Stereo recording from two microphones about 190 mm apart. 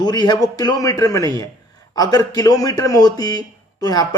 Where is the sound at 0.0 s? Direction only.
20° left (ahead or behind).